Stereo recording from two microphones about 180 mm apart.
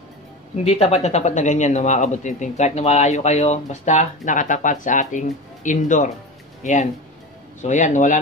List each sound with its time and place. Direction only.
0.7 s speech: 35° left (ahead or behind)